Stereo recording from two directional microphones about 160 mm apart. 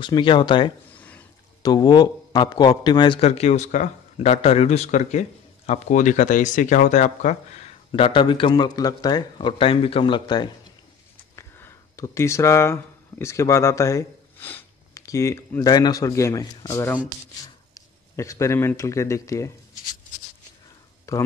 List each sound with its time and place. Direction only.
0.0 s speech: 30° left (ahead or behind)
0.9 s a sound: 10° left (ahead or behind)
1.6 s speech: 25° left (ahead or behind)
11.3 s speech: 15° left (ahead or behind)
21.1 s speech: 20° left (ahead or behind)